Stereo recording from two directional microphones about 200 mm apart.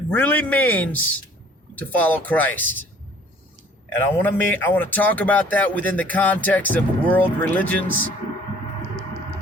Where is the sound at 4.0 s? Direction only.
10° left (ahead or behind).